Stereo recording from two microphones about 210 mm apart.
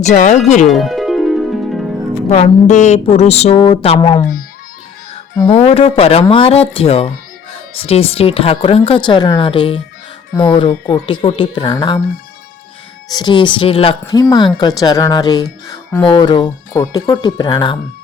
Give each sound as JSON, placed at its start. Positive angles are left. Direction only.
{"t": 0.1, "sound": "speech", "side_deg": 35}
{"t": 0.7, "sound": "music", "side_deg": 0}
{"t": 2.3, "sound": "speech", "side_deg": 30}
{"t": 5.4, "sound": "speech", "side_deg": 30}
{"t": 13.1, "sound": "speech", "side_deg": 20}